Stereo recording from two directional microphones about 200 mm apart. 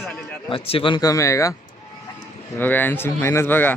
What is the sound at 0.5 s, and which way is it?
Speech, 25° left (ahead or behind).